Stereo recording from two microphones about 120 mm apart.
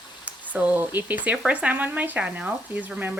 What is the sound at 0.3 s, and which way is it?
Speech, 10° right (ahead or behind).